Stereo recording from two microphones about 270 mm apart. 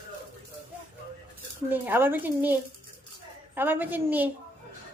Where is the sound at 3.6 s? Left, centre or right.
Centre.